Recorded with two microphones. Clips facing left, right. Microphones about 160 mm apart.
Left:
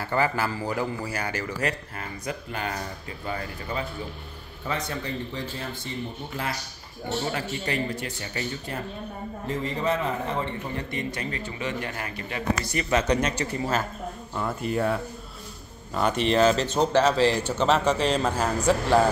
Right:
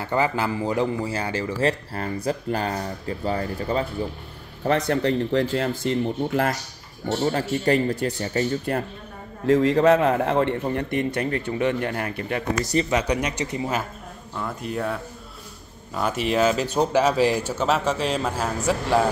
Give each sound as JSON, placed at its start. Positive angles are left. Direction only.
{"t": 0.0, "sound": "a man's voice", "side_deg": -20}
{"t": 4.6, "sound": "speech", "side_deg": -70}
{"t": 7.2, "sound": "speech", "side_deg": -40}
{"t": 9.5, "sound": "a man's voice", "side_deg": -85}
{"t": 12.9, "sound": "speech", "side_deg": -10}
{"t": 14.3, "sound": "speech", "side_deg": 5}